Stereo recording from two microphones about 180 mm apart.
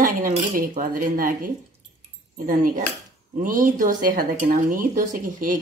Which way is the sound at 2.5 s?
50° right (ahead or behind).